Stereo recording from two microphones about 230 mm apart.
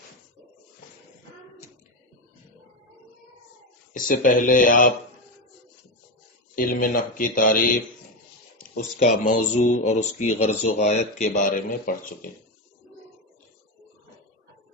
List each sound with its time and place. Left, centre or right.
3.9 s speech: left
6.6 s speech: left